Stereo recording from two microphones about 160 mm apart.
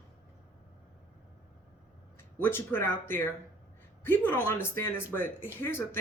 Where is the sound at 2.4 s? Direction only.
15° left (ahead or behind).